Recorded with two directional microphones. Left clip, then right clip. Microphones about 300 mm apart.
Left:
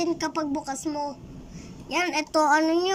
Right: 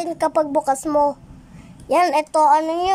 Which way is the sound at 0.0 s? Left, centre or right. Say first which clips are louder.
Right 8 dB; centre.